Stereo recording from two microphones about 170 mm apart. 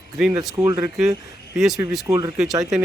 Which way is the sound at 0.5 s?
20° right (ahead or behind).